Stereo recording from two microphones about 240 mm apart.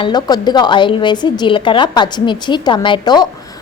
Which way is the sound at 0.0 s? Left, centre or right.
Centre.